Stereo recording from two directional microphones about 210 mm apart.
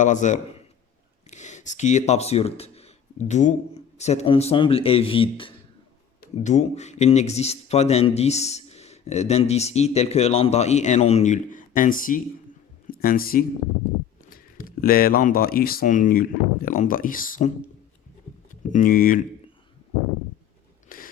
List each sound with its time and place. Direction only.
0.0 s speech: 35° left (ahead or behind)
18.7 s speech: 40° left (ahead or behind)
20.9 s a sound: 40° left (ahead or behind)